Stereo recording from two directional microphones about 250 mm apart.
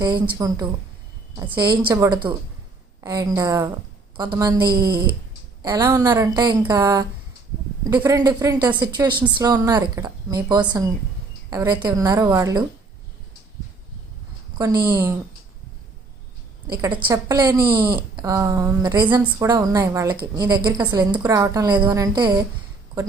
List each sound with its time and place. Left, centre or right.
0.0 s a woman's voice: centre
4.7 s speech: right
5.6 s a woman's voice: centre
14.8 s a woman's voice: centre
16.7 s a woman's voice: centre
19.2 s a woman's voice: centre